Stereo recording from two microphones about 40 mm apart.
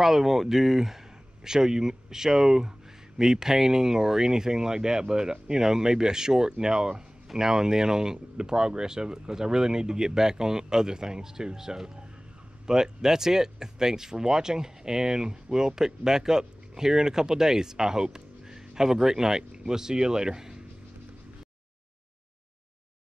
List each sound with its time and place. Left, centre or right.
0.0 s speech: centre